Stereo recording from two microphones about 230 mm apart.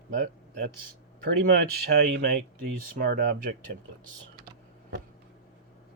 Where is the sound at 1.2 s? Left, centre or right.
Right.